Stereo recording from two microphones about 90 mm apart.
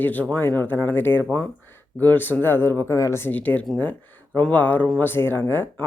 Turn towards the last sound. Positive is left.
turn(degrees=25)  # may be behind; listen again after turning